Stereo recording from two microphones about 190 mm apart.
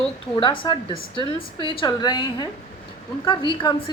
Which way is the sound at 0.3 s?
25° left (ahead or behind).